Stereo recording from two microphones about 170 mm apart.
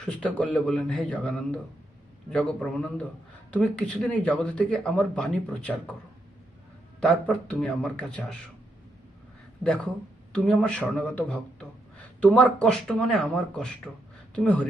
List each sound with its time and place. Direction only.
0.0 s speech: 5° left (ahead or behind)
7.0 s speech: 5° left (ahead or behind)
9.6 s speech: 5° left (ahead or behind)